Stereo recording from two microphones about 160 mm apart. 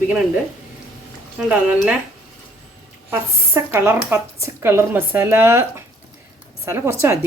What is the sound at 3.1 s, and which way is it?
Speech, 15° right (ahead or behind).